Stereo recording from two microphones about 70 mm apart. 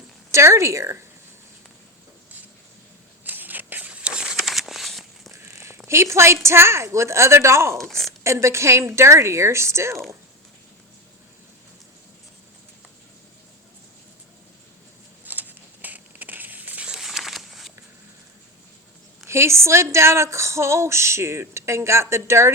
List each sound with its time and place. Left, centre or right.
0.3 s speech: right
3.2 s a sound: right; by 5.3 s centre
5.3 s a sound: right
5.7 s speech: right
7.8 s a woman's voice: centre
8.2 s speech: right
15.2 s a sound: right
16.8 s crumpling: centre
19.3 s speech: right